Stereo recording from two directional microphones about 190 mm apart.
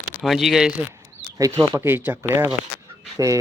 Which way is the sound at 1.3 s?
20° right (ahead or behind).